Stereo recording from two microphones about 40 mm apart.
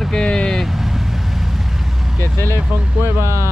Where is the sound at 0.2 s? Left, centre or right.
Left.